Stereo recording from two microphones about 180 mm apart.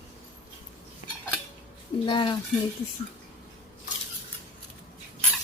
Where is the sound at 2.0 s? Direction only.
25° left (ahead or behind).